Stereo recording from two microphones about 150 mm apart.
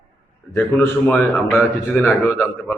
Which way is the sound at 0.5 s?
20° left (ahead or behind).